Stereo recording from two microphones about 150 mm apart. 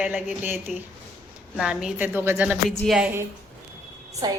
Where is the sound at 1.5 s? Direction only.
5° right (ahead or behind).